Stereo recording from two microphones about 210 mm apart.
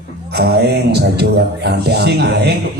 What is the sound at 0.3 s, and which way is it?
Speech, 50° right (ahead or behind).